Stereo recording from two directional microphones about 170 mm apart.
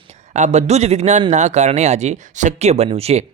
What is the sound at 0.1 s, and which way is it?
Speech, 45° right (ahead or behind).